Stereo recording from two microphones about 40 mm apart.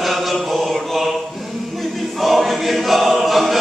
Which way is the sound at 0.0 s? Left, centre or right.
Centre.